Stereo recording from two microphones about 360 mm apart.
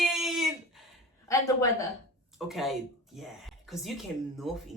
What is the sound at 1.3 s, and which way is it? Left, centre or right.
A woman's voice, centre.